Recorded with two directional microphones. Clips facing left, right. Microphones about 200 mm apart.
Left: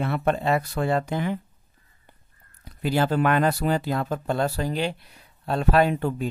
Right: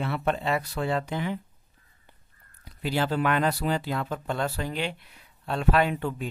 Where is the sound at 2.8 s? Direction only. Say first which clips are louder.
Left 4 dB; 45° left (ahead or behind).